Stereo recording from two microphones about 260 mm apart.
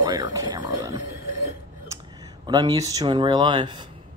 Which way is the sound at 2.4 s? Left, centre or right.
Centre.